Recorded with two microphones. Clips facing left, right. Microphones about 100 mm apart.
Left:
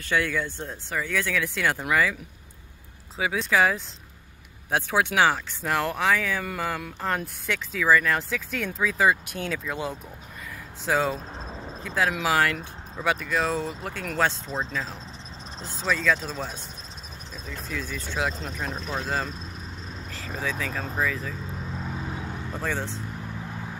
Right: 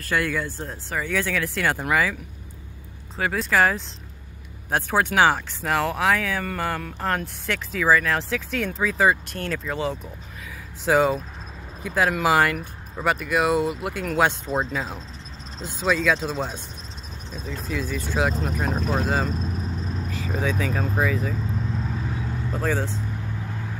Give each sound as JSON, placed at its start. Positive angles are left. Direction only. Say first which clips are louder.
{"t": 0.1, "sound": "speech", "louder": "right 1 dB", "side_deg": -5}
{"t": 3.2, "sound": "speech", "louder": "right 2 dB", "side_deg": 0}
{"t": 10.9, "sound": "speech", "louder": "right 5 dB", "side_deg": -10}
{"t": 17.5, "sound": "speech", "louder": "right 5 dB", "side_deg": -5}
{"t": 18.7, "sound": "speech", "louder": "right 7 dB", "side_deg": -40}
{"t": 19.0, "sound": "speech", "louder": "right 5 dB", "side_deg": -5}
{"t": 22.0, "sound": "vehicle", "louder": "right 3 dB", "side_deg": 20}
{"t": 22.5, "sound": "speech", "louder": "right 5 dB", "side_deg": -5}